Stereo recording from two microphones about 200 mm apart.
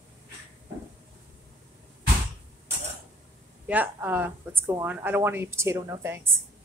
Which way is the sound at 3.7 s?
10° right (ahead or behind).